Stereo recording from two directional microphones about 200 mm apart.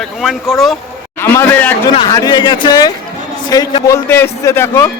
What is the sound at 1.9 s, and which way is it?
A man's voice, 20° left (ahead or behind).